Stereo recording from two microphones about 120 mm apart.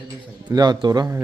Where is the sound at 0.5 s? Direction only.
35° right (ahead or behind).